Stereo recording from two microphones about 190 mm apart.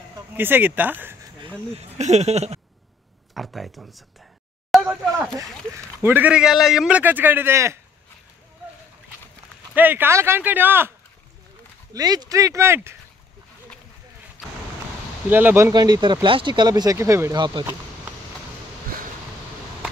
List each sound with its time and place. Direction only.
0.4 s a man's voice: 10° right (ahead or behind)
1.8 s speech: 35° right (ahead or behind)
3.3 s speech: centre (ahead or behind)
4.8 s a man's voice: 10° right (ahead or behind)
9.8 s a man's voice: 10° right (ahead or behind)
11.9 s a man's voice: 20° right (ahead or behind)
14.4 s a sound: centre (ahead or behind)
15.2 s speech: 10° right (ahead or behind)